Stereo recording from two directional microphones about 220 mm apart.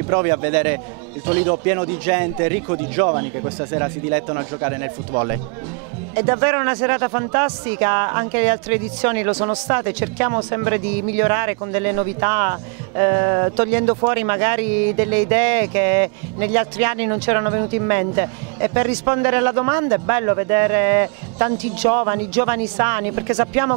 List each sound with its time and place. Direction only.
0.1 s speech: 15° right (ahead or behind)
9.3 s speech: 25° right (ahead or behind)